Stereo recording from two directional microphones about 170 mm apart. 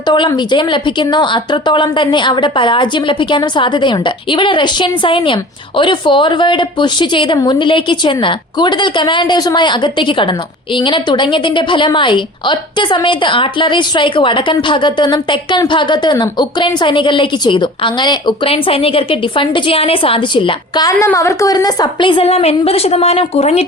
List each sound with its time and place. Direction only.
0.1 s a woman's voice: 25° left (ahead or behind)
20.9 s a woman's voice: 15° left (ahead or behind); by 23.6 s 35° left (ahead or behind)